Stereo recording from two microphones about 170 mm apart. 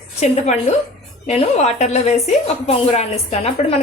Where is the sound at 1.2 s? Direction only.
40° left (ahead or behind).